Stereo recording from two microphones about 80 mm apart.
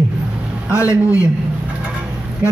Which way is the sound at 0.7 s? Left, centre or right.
Left.